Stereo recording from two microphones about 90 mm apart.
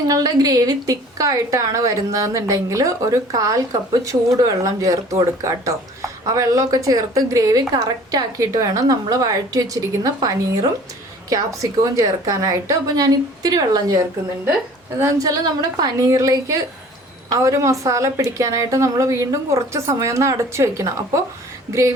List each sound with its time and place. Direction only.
0.1 s a woman's voice: 45° right (ahead or behind)
15.2 s a woman's voice: 45° right (ahead or behind)